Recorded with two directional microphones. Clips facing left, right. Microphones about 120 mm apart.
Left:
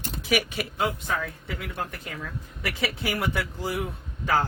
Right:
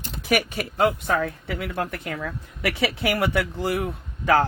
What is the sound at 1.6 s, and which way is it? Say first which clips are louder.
Speech: right 6 dB; 70° right (ahead or behind).